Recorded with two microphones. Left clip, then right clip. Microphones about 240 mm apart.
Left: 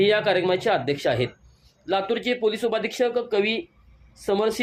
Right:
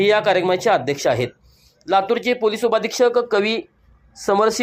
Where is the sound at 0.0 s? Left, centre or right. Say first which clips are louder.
Right 4 dB; centre.